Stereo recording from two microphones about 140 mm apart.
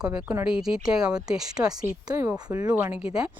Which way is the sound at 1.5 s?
25° right (ahead or behind).